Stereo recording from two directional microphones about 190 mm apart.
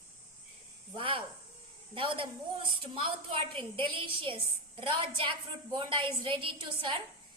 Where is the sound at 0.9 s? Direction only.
30° right (ahead or behind).